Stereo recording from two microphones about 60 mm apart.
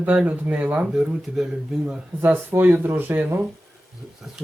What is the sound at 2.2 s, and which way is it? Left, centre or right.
Speech, right.